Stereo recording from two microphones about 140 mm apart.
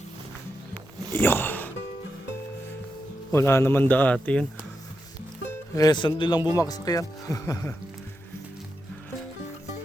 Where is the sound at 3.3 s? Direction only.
20° left (ahead or behind).